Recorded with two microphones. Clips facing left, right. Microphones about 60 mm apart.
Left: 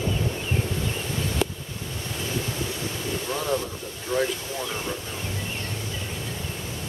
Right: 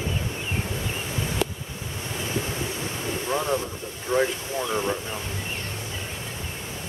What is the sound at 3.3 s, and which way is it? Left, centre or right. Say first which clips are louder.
Boat: right 2 dB; right.